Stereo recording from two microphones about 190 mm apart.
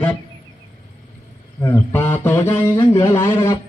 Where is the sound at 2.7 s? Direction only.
25° left (ahead or behind).